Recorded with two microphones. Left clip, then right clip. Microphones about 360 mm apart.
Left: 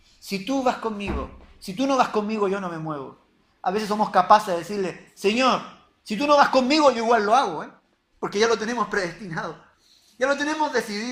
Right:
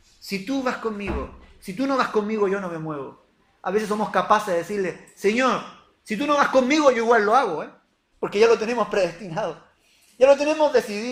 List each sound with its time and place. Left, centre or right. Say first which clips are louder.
0.3 s speech: left 2 dB; centre